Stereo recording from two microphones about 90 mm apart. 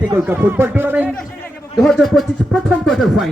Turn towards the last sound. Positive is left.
turn(degrees=0)  # may be behind; listen again after turning